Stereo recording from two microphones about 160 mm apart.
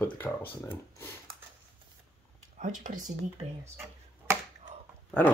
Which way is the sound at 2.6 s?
55° right (ahead or behind).